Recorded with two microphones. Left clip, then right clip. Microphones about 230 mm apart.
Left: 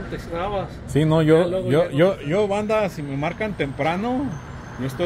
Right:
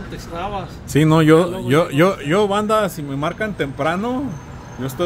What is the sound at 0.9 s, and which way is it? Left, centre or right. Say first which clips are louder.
Speech: right 4 dB; right.